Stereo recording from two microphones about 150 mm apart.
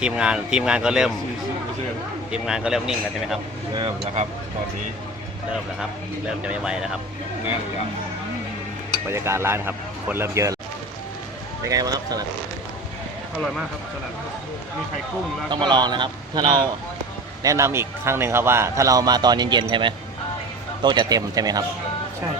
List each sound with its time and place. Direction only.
0.0 s speech: 5° right (ahead or behind)
2.3 s speech: 5° right (ahead or behind)
6.4 s speech: 5° right (ahead or behind)
9.0 s speech: 15° right (ahead or behind)
11.6 s a man's voice: 25° right (ahead or behind)
15.4 s a man's voice: 30° right (ahead or behind)